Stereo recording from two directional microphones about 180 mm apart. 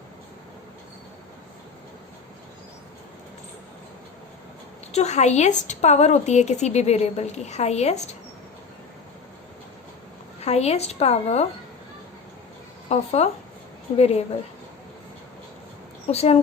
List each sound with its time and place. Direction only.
4.9 s a woman's voice: 35° left (ahead or behind)
10.4 s a woman's voice: 35° left (ahead or behind)
12.9 s a woman's voice: 35° left (ahead or behind)
16.0 s a woman's voice: 35° left (ahead or behind)